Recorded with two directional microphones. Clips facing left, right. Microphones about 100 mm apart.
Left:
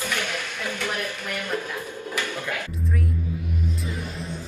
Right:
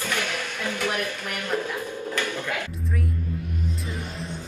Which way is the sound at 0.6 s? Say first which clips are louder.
Right 3 dB; 15° right (ahead or behind).